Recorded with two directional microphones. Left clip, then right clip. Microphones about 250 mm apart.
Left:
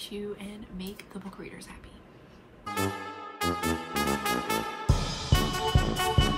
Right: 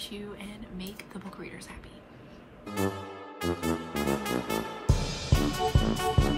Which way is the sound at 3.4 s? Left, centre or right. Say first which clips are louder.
Left 2 dB; centre.